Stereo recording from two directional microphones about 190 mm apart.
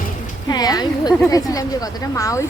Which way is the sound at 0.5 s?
20° left (ahead or behind).